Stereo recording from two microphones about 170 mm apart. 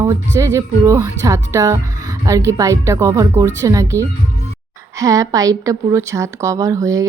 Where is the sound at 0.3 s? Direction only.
20° right (ahead or behind).